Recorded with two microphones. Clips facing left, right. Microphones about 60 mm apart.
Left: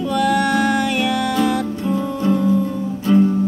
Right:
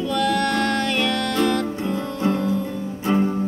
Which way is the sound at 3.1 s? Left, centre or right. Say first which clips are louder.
Left 6 dB; right.